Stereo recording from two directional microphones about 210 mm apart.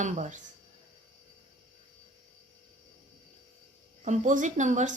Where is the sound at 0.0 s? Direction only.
35° right (ahead or behind).